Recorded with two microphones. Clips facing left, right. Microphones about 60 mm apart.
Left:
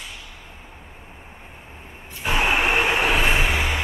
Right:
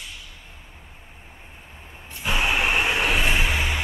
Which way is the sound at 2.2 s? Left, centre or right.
Left.